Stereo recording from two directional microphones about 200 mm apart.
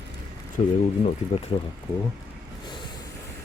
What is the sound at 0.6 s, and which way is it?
Speech, 35° left (ahead or behind).